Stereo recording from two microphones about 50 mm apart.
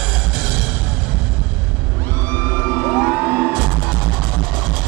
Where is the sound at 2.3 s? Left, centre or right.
Left.